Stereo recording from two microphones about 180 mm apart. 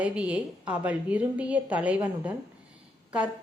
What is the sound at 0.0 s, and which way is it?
A woman's voice, 5° right (ahead or behind).